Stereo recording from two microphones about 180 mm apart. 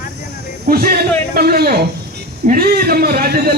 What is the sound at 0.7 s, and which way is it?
Speech, 55° right (ahead or behind).